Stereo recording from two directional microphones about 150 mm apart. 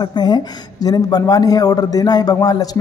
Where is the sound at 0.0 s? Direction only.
25° left (ahead or behind).